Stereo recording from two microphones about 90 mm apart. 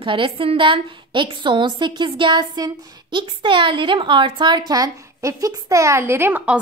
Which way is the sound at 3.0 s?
65° right (ahead or behind).